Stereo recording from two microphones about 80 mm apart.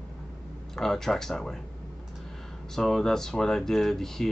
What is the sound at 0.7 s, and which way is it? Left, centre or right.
Speech, centre.